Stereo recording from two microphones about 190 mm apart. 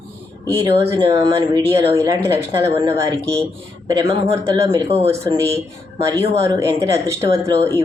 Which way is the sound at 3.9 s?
15° right (ahead or behind).